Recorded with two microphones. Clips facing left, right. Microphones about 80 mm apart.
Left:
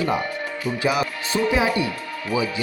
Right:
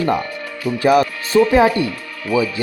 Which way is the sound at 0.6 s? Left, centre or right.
Right.